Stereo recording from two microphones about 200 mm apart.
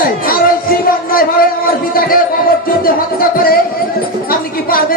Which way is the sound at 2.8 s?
45° left (ahead or behind).